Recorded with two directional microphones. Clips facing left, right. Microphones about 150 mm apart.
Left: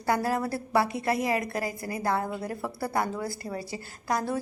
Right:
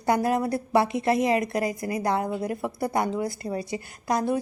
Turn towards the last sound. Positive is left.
turn(degrees=-20)  # may be behind; listen again after turning